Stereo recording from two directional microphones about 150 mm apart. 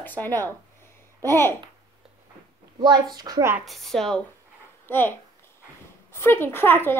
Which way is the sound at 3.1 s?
25° right (ahead or behind).